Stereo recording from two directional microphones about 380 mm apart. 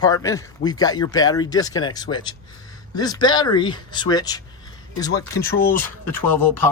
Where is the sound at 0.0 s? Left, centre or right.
Centre.